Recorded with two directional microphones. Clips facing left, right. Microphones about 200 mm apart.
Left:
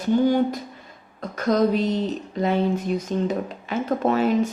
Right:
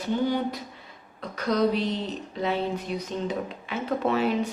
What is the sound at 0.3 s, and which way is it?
Speech, 45° left (ahead or behind).